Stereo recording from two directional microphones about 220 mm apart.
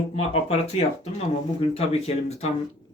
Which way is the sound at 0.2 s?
30° left (ahead or behind).